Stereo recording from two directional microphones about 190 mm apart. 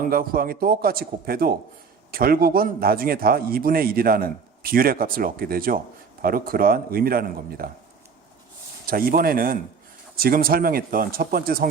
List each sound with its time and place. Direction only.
0.0 s speech: 50° right (ahead or behind)
8.9 s speech: 50° right (ahead or behind)